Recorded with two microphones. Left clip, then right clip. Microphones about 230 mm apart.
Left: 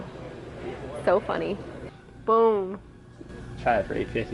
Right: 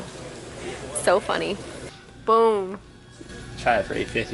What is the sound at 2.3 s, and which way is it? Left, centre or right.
Speech, centre.